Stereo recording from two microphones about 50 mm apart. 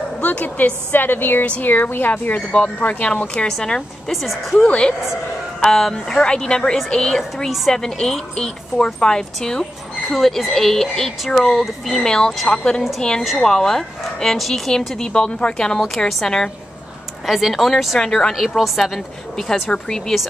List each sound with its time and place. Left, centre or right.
0.2 s a woman's voice: left
0.9 s speech: left
3.4 s speech: centre
4.1 s speech: centre
6.1 s speech: centre
7.4 s speech: centre
7.7 s speech: centre
13.2 s speech: centre
17.3 s speech: centre
17.9 s speech: centre